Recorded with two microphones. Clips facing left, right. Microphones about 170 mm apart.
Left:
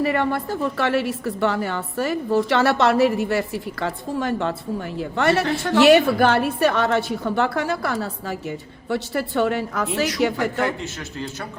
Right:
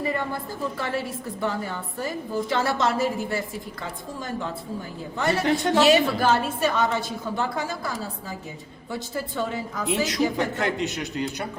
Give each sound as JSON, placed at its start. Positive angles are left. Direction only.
{"t": 0.0, "sound": "a woman's voice", "side_deg": 75}
{"t": 10.3, "sound": "a man's voice", "side_deg": -20}